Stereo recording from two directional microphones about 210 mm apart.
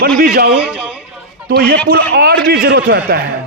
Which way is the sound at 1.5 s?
45° right (ahead or behind).